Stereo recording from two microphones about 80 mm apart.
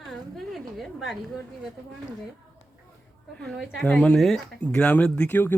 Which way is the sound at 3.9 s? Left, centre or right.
Centre.